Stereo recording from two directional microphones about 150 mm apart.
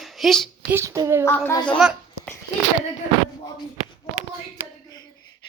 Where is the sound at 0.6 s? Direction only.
20° right (ahead or behind).